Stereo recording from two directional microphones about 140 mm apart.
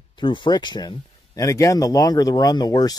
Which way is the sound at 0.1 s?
35° left (ahead or behind).